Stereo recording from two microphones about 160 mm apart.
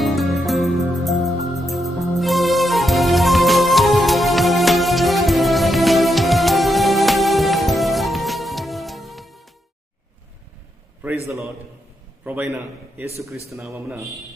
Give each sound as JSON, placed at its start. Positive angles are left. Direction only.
{"t": 0.0, "sound": "music", "side_deg": 0}
{"t": 12.2, "sound": "a man's voice", "side_deg": -10}